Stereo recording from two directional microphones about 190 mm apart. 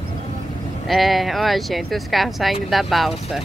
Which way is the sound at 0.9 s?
Centre (ahead or behind).